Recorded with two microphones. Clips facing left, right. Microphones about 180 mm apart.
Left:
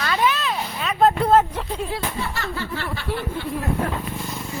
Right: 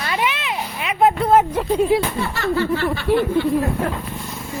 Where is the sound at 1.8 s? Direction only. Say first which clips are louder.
Right 14 dB; 10° right (ahead or behind).